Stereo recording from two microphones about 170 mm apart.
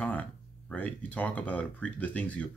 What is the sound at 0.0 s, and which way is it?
Speech, 10° left (ahead or behind).